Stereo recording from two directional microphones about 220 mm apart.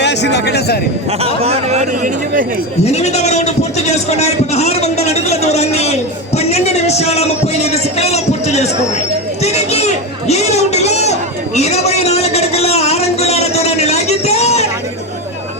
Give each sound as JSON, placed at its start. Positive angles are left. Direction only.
{"t": 0.0, "sound": "a man's voice", "side_deg": 50}
{"t": 1.2, "sound": "speech", "side_deg": -30}
{"t": 2.8, "sound": "a sound", "side_deg": 30}